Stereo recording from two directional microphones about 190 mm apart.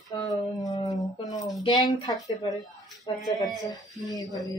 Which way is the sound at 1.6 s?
20° left (ahead or behind).